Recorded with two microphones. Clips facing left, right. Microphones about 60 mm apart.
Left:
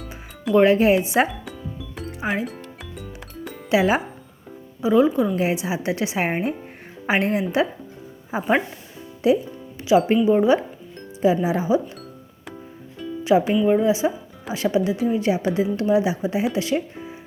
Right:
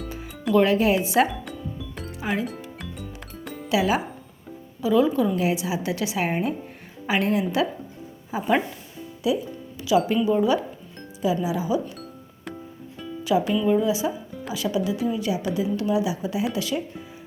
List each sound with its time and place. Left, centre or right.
0.5 s a woman's voice: left
1.3 s music: centre
3.7 s a woman's voice: left
9.2 s music: left
10.2 s a woman's voice: left
13.2 s a woman's voice: left